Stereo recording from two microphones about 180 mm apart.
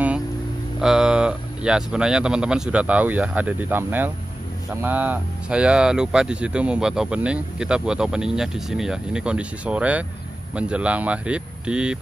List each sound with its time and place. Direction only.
0.7 s speech: 5° right (ahead or behind)